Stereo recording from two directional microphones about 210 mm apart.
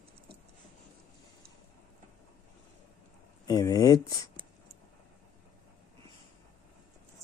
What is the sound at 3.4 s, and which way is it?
Speech, 15° left (ahead or behind).